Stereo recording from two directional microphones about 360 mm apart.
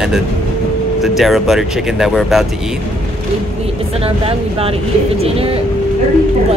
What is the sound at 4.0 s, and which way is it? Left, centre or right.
Speech, centre.